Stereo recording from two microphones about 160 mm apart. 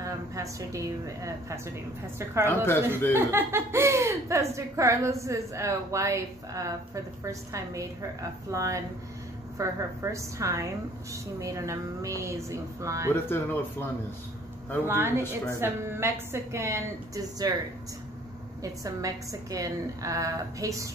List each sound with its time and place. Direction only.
0.0 s speech: 20° right (ahead or behind)
2.4 s speech: 15° left (ahead or behind)
3.2 s speech: 15° right (ahead or behind)
13.1 s speech: 10° left (ahead or behind)
14.9 s a woman's voice: 15° right (ahead or behind)
18.6 s speech: 20° right (ahead or behind)